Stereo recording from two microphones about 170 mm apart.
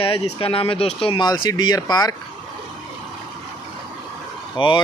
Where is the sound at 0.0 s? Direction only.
35° left (ahead or behind).